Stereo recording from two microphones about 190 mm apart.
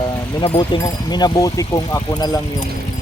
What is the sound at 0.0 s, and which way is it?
Speech, 20° left (ahead or behind).